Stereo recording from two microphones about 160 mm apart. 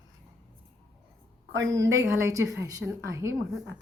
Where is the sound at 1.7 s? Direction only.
20° right (ahead or behind).